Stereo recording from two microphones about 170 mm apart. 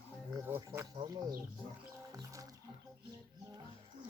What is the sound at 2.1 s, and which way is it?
Music, 20° right (ahead or behind).